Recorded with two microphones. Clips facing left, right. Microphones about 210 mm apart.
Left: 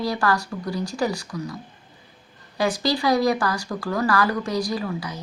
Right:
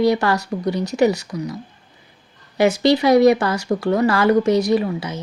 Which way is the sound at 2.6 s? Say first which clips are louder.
Right 8 dB; 25° right (ahead or behind).